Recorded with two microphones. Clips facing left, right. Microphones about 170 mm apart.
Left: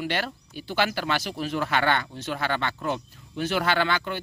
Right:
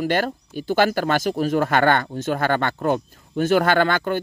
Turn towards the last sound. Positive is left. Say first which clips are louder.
# right 6 dB
turn(degrees=-45)  # may be behind; listen again after turning